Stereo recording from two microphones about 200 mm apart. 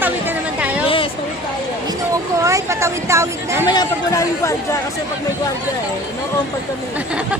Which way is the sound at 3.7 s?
20° left (ahead or behind).